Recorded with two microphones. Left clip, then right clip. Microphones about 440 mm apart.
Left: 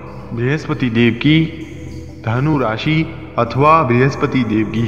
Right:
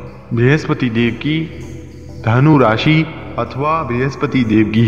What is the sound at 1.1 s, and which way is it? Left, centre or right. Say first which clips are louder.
Speech: left 5 dB; left.